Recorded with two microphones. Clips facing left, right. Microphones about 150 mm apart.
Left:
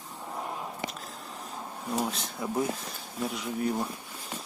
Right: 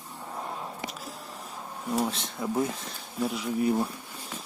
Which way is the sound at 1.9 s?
Centre (ahead or behind).